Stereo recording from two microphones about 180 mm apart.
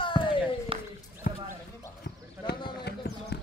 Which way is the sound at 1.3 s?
55° left (ahead or behind).